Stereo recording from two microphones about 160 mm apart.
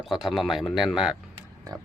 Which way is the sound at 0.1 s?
Centre (ahead or behind).